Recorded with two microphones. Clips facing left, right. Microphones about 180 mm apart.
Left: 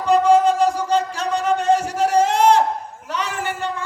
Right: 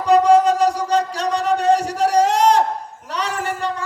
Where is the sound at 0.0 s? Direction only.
35° right (ahead or behind).